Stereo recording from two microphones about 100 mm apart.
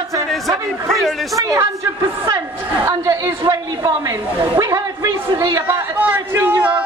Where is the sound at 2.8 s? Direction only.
35° right (ahead or behind).